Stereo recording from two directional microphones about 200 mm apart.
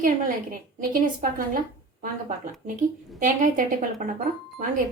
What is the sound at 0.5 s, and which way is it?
Speech, 45° right (ahead or behind).